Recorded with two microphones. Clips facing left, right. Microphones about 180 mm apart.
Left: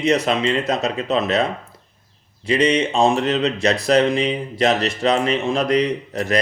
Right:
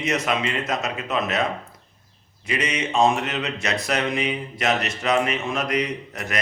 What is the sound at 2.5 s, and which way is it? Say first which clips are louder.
Speech: left 8 dB; 30° left (ahead or behind).